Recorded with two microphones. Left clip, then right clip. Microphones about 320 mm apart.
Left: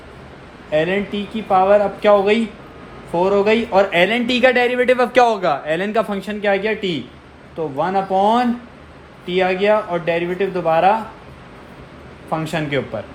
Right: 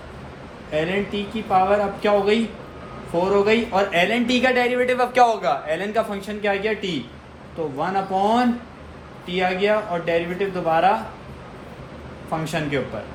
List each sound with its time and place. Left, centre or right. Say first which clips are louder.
0.7 s speech: left 5 dB; left
12.5 s speech: left 3 dB; left